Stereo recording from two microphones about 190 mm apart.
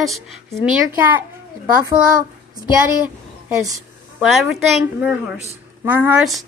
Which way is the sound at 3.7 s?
Centre (ahead or behind).